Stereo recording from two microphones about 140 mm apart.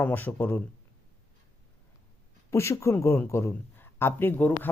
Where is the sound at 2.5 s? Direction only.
20° left (ahead or behind).